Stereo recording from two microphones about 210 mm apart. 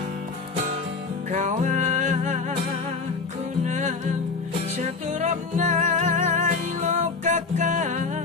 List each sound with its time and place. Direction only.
1.3 s music: 35° right (ahead or behind)
3.7 s music: 35° right (ahead or behind)